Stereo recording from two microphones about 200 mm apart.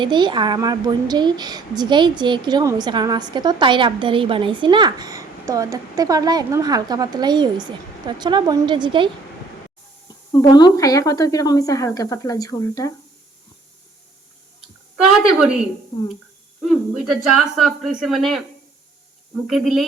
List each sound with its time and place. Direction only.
0.0 s a woman's voice: 25° right (ahead or behind)
10.5 s speech: 20° left (ahead or behind)
16.6 s speech: centre (ahead or behind)
19.5 s speech: centre (ahead or behind)